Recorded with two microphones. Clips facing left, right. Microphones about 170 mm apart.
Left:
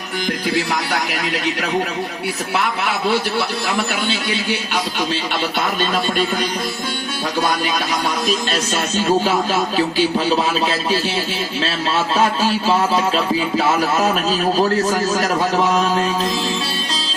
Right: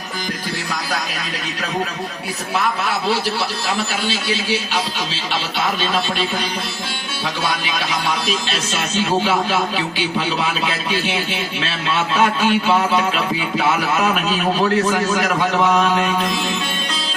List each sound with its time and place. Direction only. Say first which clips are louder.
0.5 s a man's voice: left 4 dB; 65° left (ahead or behind)
2.6 s a man's voice: right 1 dB; 65° left (ahead or behind)
8.0 s speech: left 2 dB; 45° left (ahead or behind)